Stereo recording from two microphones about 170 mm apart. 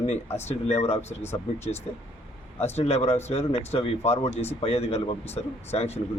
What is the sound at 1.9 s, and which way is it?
A man's voice, 40° left (ahead or behind).